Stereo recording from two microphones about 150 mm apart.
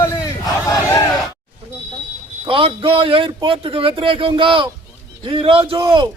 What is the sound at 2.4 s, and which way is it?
A man's voice, 35° right (ahead or behind).